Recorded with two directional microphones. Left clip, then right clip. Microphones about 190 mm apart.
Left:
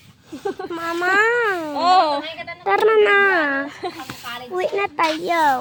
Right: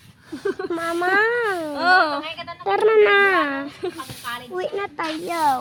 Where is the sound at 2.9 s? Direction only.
10° right (ahead or behind).